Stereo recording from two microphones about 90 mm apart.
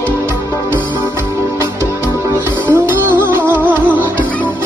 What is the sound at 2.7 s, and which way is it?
Music, 25° right (ahead or behind).